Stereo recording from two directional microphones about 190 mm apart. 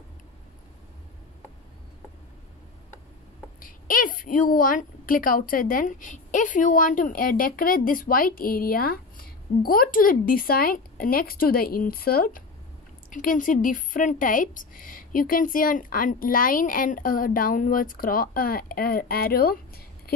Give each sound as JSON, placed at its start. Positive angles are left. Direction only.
{"t": 3.5, "sound": "a woman's voice", "side_deg": 45}